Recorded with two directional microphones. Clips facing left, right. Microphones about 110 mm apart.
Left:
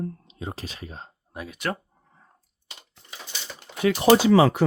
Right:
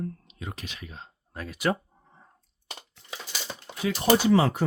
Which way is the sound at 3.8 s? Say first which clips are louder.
Left 5 dB; 85° left.